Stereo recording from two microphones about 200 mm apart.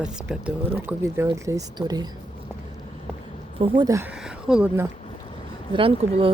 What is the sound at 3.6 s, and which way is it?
Speech, 20° right (ahead or behind).